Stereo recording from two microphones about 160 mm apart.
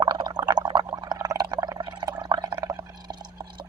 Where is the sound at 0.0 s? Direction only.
30° right (ahead or behind).